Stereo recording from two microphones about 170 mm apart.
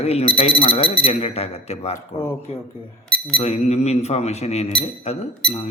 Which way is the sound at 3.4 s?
40° left (ahead or behind).